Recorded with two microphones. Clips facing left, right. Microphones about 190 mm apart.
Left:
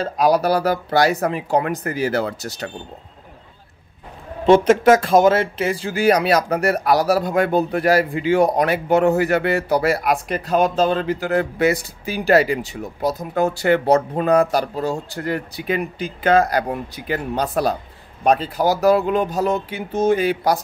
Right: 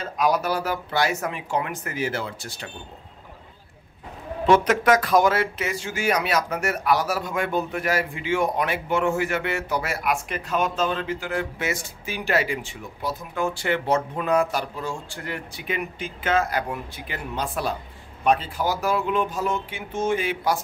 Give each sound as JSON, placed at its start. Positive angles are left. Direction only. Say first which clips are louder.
{"t": 0.0, "sound": "speech", "louder": "left 6 dB", "side_deg": 35}
{"t": 4.5, "sound": "speech", "louder": "left 6 dB", "side_deg": 25}